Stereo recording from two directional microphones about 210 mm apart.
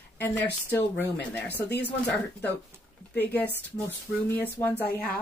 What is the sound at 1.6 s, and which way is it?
Speech, 50° left (ahead or behind).